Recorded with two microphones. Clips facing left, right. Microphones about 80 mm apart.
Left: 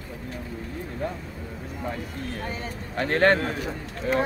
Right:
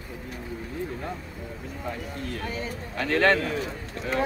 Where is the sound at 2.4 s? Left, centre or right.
Left.